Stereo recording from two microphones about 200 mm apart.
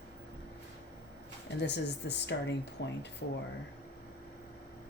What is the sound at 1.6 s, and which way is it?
Speech, 60° left (ahead or behind).